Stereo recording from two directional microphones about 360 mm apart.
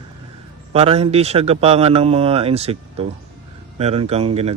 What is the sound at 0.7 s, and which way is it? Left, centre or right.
A man's voice, centre.